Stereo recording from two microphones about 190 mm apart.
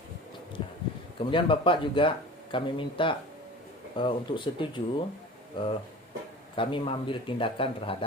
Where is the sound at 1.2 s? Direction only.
25° left (ahead or behind).